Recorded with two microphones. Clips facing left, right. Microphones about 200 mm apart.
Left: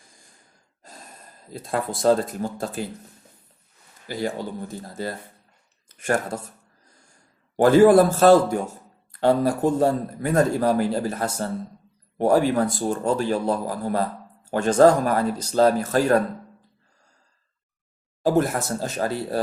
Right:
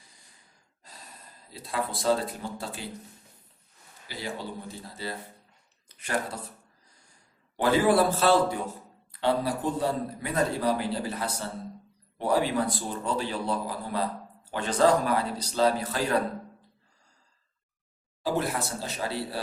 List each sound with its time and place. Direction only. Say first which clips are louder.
0.8 s gasp: left 6 dB; 50° left (ahead or behind)
1.5 s speech: left 5 dB; 50° left (ahead or behind)
4.1 s speech: left 8 dB; 45° left (ahead or behind)
7.5 s speech: left 9 dB; 45° left (ahead or behind)
18.2 s speech: left 8 dB; 45° left (ahead or behind)